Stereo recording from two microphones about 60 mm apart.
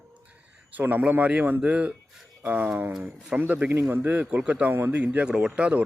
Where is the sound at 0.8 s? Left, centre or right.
Right.